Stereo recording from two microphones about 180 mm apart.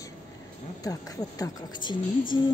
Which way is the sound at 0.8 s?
20° left (ahead or behind).